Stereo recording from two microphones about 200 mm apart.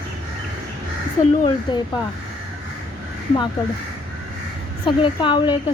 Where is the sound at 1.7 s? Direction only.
20° left (ahead or behind).